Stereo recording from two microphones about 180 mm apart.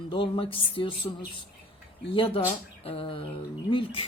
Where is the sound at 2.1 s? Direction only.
30° left (ahead or behind).